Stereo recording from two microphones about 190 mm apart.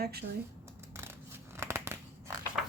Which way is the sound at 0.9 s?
15° right (ahead or behind).